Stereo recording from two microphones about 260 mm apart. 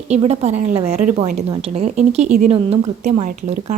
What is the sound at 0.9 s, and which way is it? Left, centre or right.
Speech, right.